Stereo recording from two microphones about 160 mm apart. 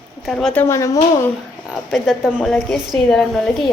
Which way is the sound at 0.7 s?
20° left (ahead or behind).